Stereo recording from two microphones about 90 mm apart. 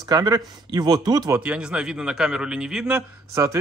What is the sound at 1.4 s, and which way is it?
Speech, 10° right (ahead or behind).